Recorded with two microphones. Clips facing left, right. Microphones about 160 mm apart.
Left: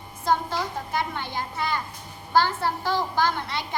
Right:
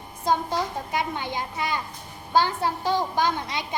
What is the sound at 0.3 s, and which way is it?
A woman's voice, 15° right (ahead or behind).